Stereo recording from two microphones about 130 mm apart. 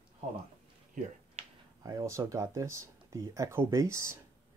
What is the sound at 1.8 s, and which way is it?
Speech, 25° right (ahead or behind).